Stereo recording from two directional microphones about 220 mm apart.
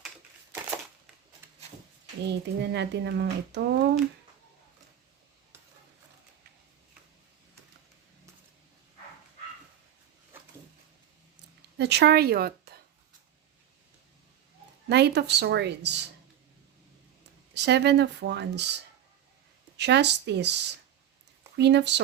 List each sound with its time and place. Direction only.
2.2 s speech: 50° right (ahead or behind)
11.8 s speech: 50° right (ahead or behind)
14.8 s speech: 50° right (ahead or behind)
17.5 s speech: 50° right (ahead or behind)